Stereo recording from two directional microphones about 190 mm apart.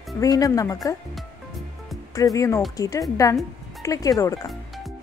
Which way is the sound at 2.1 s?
15° left (ahead or behind).